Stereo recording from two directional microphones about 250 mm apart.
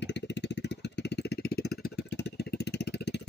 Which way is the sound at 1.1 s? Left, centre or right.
Left.